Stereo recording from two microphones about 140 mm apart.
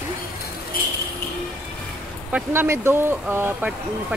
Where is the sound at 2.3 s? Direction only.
15° right (ahead or behind).